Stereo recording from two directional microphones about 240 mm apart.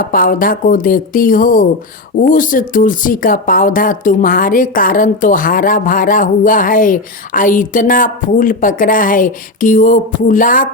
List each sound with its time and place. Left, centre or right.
0.0 s speech: left